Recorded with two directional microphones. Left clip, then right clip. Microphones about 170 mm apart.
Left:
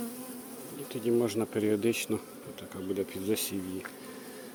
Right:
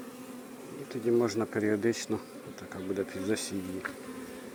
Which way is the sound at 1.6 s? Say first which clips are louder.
Left 1 dB; 35° left (ahead or behind).